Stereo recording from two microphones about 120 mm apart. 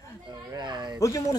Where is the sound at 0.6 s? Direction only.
40° right (ahead or behind).